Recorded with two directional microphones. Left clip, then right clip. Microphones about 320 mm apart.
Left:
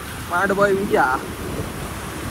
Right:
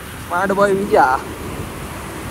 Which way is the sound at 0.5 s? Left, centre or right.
Right.